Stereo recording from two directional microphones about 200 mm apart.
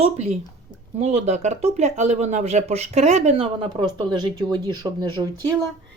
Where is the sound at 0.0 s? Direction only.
35° right (ahead or behind).